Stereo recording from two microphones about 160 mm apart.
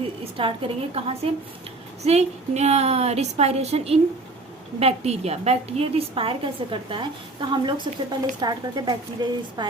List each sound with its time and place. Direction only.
0.4 s a woman's voice: 35° right (ahead or behind)